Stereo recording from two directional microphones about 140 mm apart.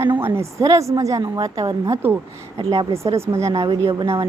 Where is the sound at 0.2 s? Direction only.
15° right (ahead or behind).